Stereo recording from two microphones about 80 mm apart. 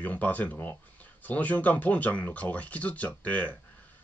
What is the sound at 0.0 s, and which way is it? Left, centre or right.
Speech, left.